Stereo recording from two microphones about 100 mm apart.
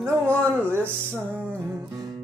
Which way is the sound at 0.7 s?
20° right (ahead or behind).